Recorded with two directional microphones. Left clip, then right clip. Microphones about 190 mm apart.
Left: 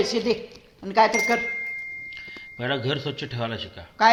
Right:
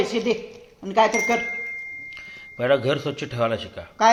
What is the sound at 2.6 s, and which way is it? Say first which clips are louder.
A man's voice: right 6 dB; 15° right (ahead or behind).